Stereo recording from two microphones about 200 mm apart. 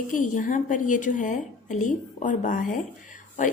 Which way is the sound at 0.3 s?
40° left (ahead or behind).